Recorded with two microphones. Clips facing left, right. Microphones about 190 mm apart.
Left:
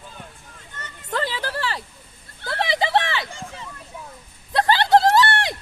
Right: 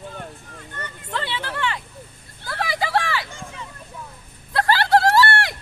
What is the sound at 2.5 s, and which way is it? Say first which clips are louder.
Vehicle: left 2 dB; 25° left (ahead or behind).